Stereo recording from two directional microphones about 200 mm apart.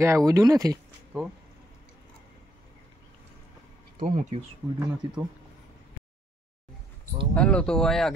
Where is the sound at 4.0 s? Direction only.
35° right (ahead or behind).